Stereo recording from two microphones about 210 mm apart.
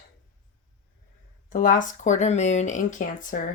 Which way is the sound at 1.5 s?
40° left (ahead or behind).